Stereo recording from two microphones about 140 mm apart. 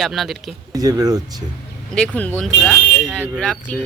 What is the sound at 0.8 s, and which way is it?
Speech, 25° right (ahead or behind).